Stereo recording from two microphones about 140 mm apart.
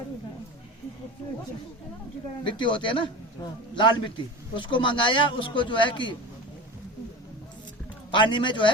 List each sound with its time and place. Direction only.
2.4 s a man's voice: 35° left (ahead or behind)
8.1 s a man's voice: 35° left (ahead or behind)